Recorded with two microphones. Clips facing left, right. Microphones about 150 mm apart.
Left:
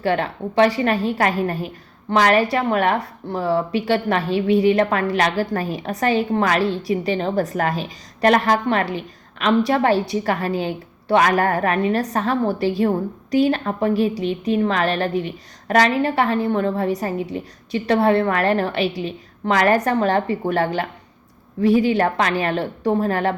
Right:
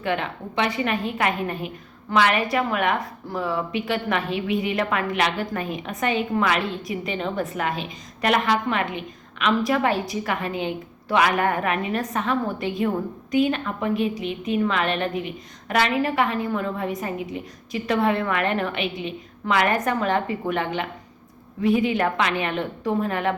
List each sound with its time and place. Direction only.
0.0 s a woman's voice: 35° left (ahead or behind)